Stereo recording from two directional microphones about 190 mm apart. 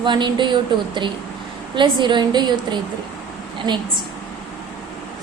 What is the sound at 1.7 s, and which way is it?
A woman's voice, 25° right (ahead or behind).